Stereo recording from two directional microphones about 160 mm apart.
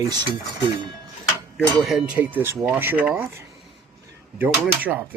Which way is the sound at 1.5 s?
Centre (ahead or behind).